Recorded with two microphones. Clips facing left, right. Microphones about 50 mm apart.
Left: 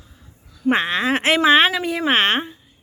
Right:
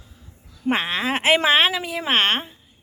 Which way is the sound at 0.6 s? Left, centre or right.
Centre.